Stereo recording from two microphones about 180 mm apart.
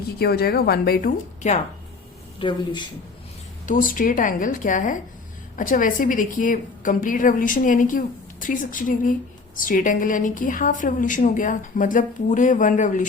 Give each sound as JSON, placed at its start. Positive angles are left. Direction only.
{"t": 0.2, "sound": "a woman's voice", "side_deg": 60}
{"t": 2.4, "sound": "speech", "side_deg": 25}
{"t": 3.7, "sound": "a woman's voice", "side_deg": 50}